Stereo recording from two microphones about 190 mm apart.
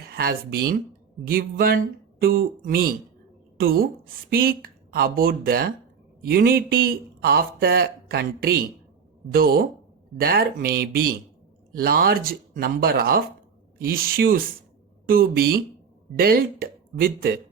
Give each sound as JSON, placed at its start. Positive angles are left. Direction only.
{"t": 0.1, "sound": "speech", "side_deg": -55}